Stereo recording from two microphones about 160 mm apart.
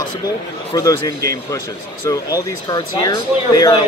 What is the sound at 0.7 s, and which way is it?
Speech, 20° left (ahead or behind).